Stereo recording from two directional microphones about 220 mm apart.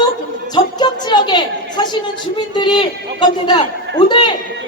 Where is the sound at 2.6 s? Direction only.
20° left (ahead or behind).